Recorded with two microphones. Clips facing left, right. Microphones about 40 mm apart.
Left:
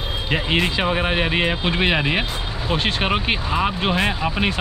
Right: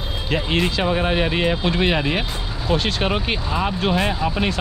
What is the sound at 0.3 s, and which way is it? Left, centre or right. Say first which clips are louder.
Speech: even; centre.